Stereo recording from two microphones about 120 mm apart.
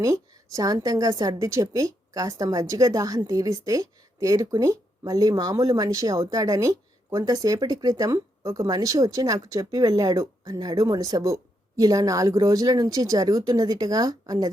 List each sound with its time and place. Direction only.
0.5 s a woman's voice: 30° right (ahead or behind)